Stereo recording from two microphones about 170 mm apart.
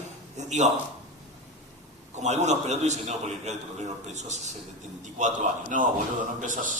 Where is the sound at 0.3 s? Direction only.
45° right (ahead or behind).